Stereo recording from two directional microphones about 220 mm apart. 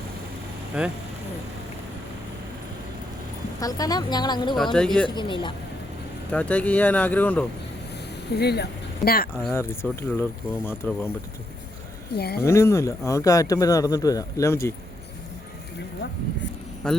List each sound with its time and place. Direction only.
0.7 s speech: 5° right (ahead or behind)
3.6 s speech: 15° left (ahead or behind)
4.5 s speech: centre (ahead or behind)
5.0 s speech: 20° left (ahead or behind)
6.3 s speech: 5° left (ahead or behind)
8.4 s speech: 50° left (ahead or behind)
9.4 s speech: 10° left (ahead or behind)
12.1 s speech: 45° left (ahead or behind)
12.5 s speech: 15° left (ahead or behind)
16.8 s speech: 5° left (ahead or behind)